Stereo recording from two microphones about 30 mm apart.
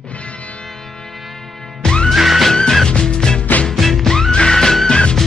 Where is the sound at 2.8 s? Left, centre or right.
Left.